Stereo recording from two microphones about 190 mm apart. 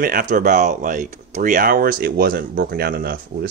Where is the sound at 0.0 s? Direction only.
45° right (ahead or behind).